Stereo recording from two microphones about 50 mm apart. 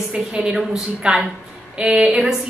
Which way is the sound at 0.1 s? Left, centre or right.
Centre.